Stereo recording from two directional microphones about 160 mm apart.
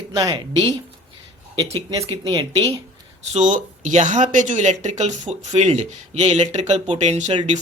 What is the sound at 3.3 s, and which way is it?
Speech, 50° right (ahead or behind).